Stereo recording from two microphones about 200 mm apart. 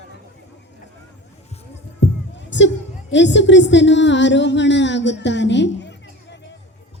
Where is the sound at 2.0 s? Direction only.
65° left (ahead or behind).